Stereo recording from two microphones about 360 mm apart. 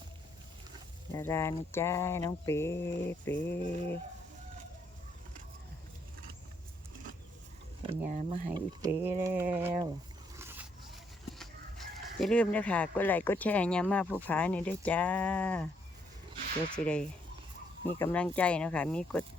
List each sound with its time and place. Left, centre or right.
1.1 s speech: centre
7.8 s speech: centre
8.8 s speech: centre
10.3 s zipper: centre
12.2 s speech: centre
16.7 s speech: centre